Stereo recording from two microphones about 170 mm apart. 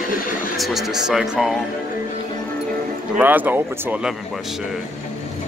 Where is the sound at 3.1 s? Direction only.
10° right (ahead or behind).